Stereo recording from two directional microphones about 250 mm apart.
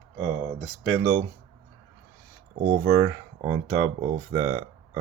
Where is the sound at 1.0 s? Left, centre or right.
Centre.